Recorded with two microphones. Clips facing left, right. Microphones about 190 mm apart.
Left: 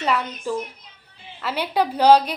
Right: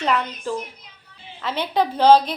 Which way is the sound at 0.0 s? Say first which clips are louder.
Right 1 dB; 10° left (ahead or behind).